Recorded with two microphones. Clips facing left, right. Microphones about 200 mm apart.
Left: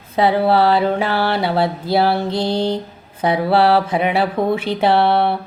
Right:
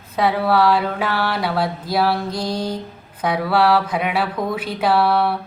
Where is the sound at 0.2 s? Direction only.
30° left (ahead or behind).